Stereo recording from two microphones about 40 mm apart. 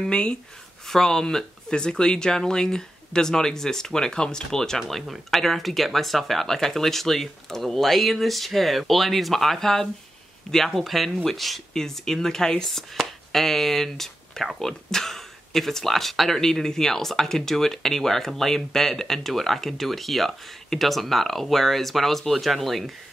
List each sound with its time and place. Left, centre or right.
0.1 s speech: left
0.8 s speech: centre
11.7 s speech: centre